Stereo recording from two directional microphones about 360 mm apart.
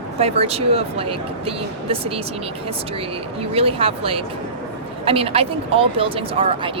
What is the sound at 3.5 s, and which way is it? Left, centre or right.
Speech, centre.